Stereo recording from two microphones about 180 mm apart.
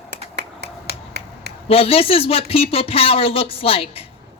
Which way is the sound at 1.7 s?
30° left (ahead or behind).